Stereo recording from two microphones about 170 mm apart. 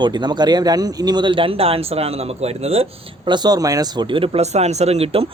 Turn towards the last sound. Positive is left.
turn(degrees=-35)  # may be behind; listen again after turning